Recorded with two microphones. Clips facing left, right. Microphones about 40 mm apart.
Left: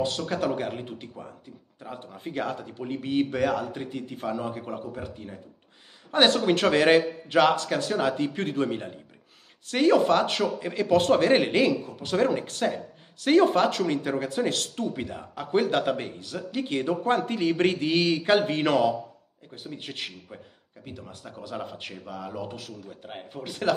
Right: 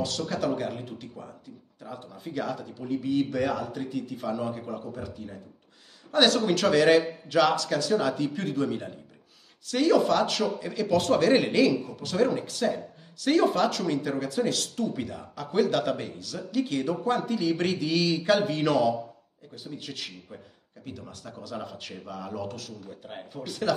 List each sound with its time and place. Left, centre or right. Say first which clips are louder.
0.3 s speech: left 1 dB; left
3.7 s speech: right 2 dB; left
20.8 s speech: right 1 dB; left
22.0 s speech: right 1 dB; centre
23.3 s speech: left 1 dB; left